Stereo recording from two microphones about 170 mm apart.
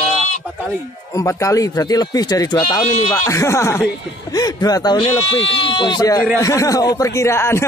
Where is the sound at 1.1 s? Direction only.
20° left (ahead or behind).